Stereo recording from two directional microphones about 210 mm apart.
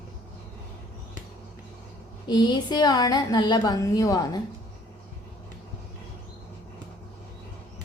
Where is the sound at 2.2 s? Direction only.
20° left (ahead or behind).